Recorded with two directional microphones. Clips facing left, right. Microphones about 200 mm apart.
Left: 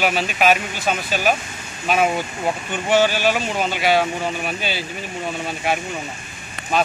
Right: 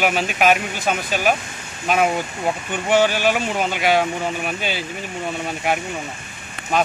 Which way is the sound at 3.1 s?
15° right (ahead or behind).